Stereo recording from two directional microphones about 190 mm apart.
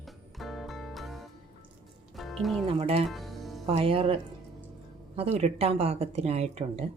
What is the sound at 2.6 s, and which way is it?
Speech, 30° right (ahead or behind).